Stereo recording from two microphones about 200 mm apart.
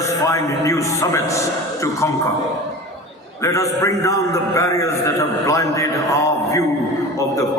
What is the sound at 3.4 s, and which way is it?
A man's voice, 15° left (ahead or behind).